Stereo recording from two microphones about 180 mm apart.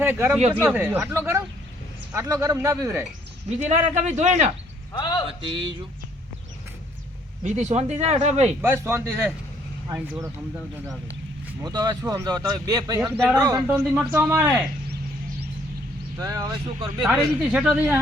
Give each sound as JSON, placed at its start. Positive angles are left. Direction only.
{"t": 0.0, "sound": "speech", "side_deg": -10}
{"t": 3.6, "sound": "speech", "side_deg": -40}
{"t": 4.9, "sound": "a man's voice", "side_deg": 25}
{"t": 5.4, "sound": "speech", "side_deg": -30}
{"t": 7.4, "sound": "speech", "side_deg": -40}
{"t": 8.6, "sound": "speech", "side_deg": -15}
{"t": 11.6, "sound": "speech", "side_deg": -20}
{"t": 13.1, "sound": "a woman's voice", "side_deg": 0}
{"t": 13.4, "sound": "speech", "side_deg": -20}
{"t": 16.1, "sound": "speech", "side_deg": -20}
{"t": 17.0, "sound": "a woman's voice", "side_deg": -5}